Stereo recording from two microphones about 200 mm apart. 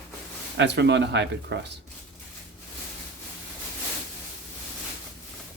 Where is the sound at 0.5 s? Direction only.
60° right (ahead or behind).